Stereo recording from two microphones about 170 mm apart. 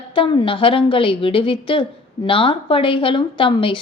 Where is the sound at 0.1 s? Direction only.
30° left (ahead or behind).